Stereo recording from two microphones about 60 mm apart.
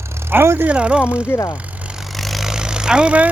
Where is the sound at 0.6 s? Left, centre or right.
Centre.